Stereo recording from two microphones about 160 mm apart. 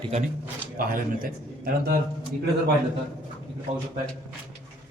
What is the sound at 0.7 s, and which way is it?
A man's voice, 65° right (ahead or behind).